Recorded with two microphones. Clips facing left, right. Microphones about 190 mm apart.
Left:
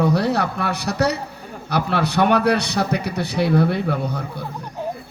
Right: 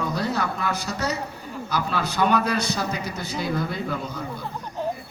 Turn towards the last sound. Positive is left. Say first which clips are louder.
# left 6 dB
turn(degrees=65)  # may be behind; listen again after turning